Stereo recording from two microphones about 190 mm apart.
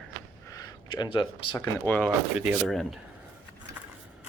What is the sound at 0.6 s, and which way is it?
Speech, 25° left (ahead or behind).